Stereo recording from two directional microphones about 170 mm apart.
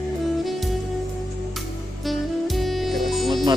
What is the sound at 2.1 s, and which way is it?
Music, centre (ahead or behind).